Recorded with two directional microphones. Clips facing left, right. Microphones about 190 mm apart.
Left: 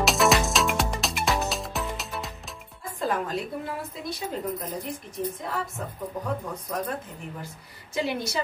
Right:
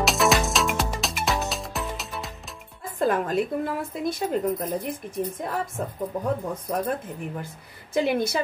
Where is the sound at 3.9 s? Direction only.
55° right (ahead or behind).